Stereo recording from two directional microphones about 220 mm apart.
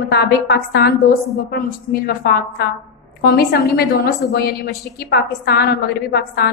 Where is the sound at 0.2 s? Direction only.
45° left (ahead or behind).